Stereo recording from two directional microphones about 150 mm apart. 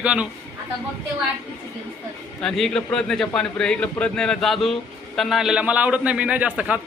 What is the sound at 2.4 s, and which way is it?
A man's voice, 5° left (ahead or behind).